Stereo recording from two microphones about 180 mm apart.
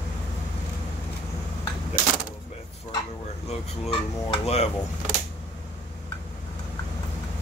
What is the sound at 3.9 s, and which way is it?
Speech, 35° left (ahead or behind).